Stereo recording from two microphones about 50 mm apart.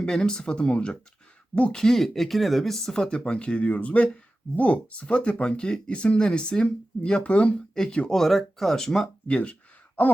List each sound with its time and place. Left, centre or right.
0.0 s speech: centre
8.1 s speech: centre
9.2 s a sound: left